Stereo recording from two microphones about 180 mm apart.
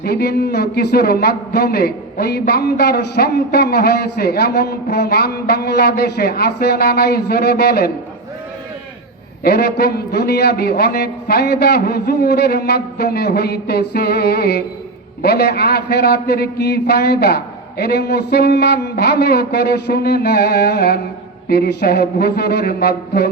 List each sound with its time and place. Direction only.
0.0 s a man's voice: 60° left (ahead or behind)
9.4 s a man's voice: 60° left (ahead or behind)